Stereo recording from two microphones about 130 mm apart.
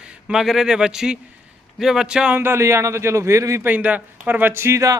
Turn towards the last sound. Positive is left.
turn(degrees=-25)  # may be behind; listen again after turning